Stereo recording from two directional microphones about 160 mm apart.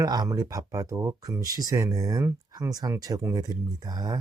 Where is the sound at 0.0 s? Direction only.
25° right (ahead or behind).